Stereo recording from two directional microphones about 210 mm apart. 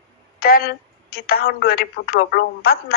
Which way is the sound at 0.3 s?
45° left (ahead or behind).